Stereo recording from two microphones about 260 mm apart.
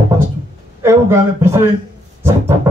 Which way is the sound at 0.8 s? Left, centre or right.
Centre.